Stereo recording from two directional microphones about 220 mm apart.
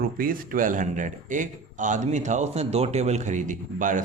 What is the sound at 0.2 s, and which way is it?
Speech, 40° right (ahead or behind).